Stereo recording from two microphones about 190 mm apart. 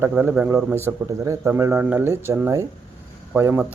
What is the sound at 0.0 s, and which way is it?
Speech, 10° right (ahead or behind).